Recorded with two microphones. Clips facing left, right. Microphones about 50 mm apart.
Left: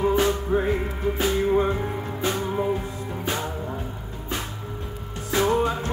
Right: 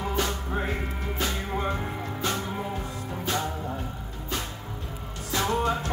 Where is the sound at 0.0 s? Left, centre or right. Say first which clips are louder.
Left 8 dB; left.